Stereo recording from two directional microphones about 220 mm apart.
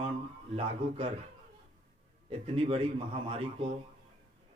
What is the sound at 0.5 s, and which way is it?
Speech, 25° right (ahead or behind).